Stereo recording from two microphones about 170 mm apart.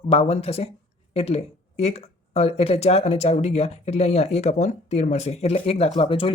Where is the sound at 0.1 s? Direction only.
35° left (ahead or behind).